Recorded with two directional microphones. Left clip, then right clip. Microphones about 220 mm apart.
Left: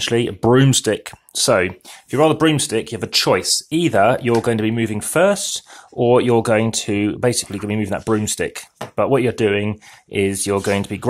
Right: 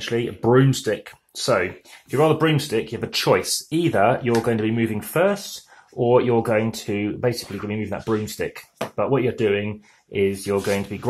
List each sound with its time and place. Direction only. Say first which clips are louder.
0.0 s speech: left 5 dB; 50° left (ahead or behind)